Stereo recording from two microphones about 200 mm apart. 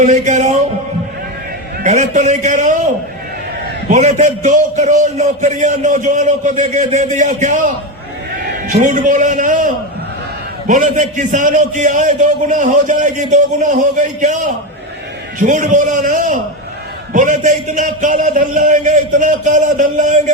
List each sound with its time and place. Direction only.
0.0 s a man's voice: 40° right (ahead or behind)
1.8 s a man's voice: 35° right (ahead or behind)